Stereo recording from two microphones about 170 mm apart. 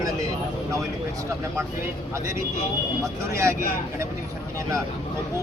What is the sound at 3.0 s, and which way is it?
Speech, 15° right (ahead or behind).